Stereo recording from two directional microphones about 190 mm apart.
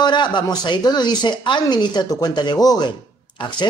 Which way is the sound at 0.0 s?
25° left (ahead or behind).